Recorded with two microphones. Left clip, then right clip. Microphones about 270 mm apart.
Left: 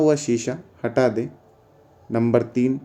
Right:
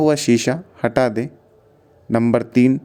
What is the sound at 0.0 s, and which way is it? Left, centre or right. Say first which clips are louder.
Speech: right 3 dB; right.